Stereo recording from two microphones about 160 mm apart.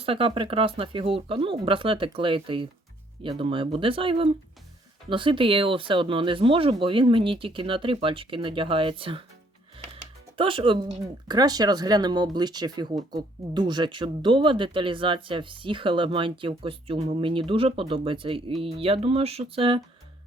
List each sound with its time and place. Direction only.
0.0 s speech: 35° right (ahead or behind)
10.3 s speech: 35° right (ahead or behind)